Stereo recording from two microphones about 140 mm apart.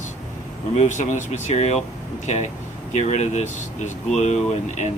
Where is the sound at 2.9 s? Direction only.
55° left (ahead or behind).